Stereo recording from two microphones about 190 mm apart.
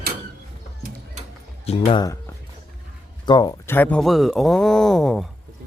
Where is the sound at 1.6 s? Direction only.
30° left (ahead or behind).